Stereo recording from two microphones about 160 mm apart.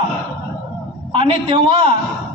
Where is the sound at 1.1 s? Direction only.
35° right (ahead or behind).